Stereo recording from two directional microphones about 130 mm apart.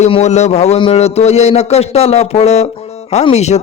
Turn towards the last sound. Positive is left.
turn(degrees=60)  # may be behind; listen again after turning